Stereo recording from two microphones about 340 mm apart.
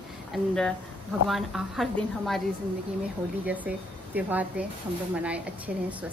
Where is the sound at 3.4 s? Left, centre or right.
Centre.